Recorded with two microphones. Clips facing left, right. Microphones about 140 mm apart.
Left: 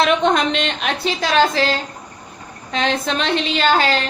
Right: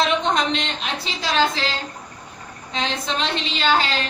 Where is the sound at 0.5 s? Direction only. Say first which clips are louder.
Left 4 dB; 65° left (ahead or behind).